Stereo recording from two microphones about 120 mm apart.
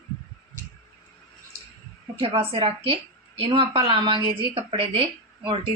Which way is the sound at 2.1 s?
50° right (ahead or behind).